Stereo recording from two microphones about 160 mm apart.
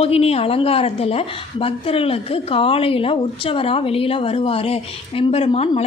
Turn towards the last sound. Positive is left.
turn(degrees=40)  # may be behind; listen again after turning